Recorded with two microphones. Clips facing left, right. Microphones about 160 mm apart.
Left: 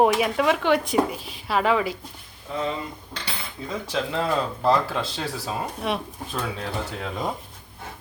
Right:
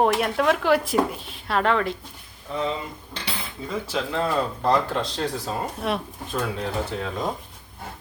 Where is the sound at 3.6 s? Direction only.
Centre (ahead or behind).